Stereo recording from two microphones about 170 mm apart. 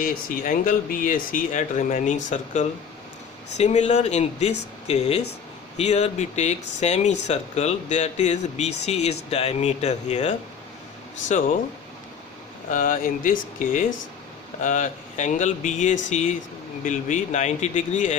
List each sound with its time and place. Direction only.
0.0 s speech: 55° left (ahead or behind)
12.7 s speech: 50° left (ahead or behind)